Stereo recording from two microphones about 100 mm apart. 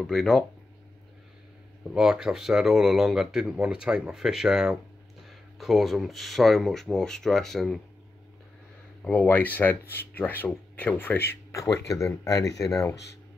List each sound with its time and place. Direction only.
0.0 s speech: 5° left (ahead or behind)
2.0 s speech: 5° right (ahead or behind)
9.0 s speech: 15° left (ahead or behind); by 12.9 s 30° left (ahead or behind)